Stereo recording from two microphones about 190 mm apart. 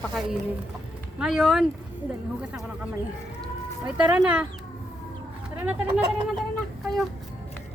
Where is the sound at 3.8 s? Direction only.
5° right (ahead or behind).